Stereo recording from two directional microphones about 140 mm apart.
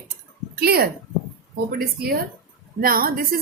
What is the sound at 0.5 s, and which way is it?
A woman's voice, 90° right.